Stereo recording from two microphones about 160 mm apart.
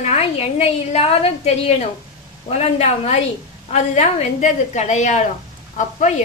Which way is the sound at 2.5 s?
45° left (ahead or behind).